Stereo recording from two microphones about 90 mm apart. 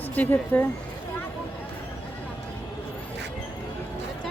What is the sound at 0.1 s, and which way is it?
Speech, 20° left (ahead or behind).